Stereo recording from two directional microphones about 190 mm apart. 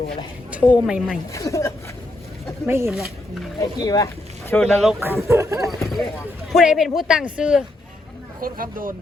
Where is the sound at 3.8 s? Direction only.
20° left (ahead or behind).